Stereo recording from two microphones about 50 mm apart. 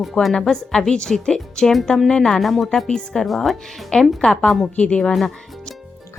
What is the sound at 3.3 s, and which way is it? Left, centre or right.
Speech, centre.